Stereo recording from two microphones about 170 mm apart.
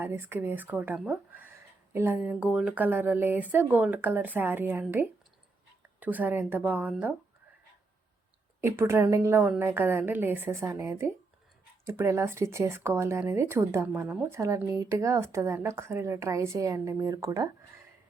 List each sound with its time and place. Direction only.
0.0 s speech: 15° right (ahead or behind)
8.6 s speech: 15° right (ahead or behind)